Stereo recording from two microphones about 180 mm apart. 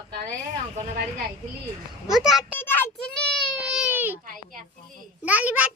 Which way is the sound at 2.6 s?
10° left (ahead or behind).